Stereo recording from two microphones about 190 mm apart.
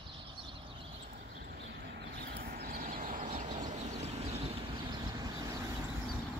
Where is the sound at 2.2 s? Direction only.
55° right (ahead or behind); by 4.4 s 35° right (ahead or behind).